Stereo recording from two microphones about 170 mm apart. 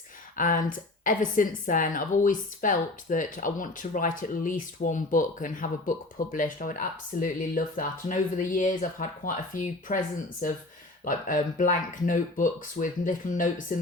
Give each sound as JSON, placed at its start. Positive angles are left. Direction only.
{"t": 0.3, "sound": "a woman's voice", "side_deg": 50}
{"t": 11.0, "sound": "a woman's voice", "side_deg": 50}